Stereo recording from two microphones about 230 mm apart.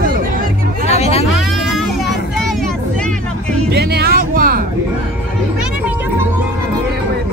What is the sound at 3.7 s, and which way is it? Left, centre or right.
Music, right.